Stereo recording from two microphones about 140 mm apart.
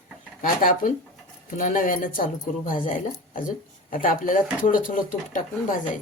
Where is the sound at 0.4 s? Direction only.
80° left.